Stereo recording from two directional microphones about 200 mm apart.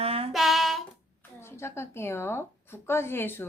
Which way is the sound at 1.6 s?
15° left (ahead or behind).